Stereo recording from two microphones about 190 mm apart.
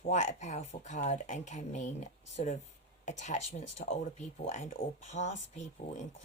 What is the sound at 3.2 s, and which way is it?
Speech, 35° left (ahead or behind).